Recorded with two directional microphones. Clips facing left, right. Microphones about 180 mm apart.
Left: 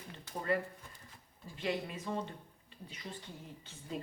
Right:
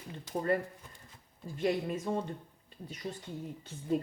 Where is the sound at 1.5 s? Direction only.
45° right (ahead or behind).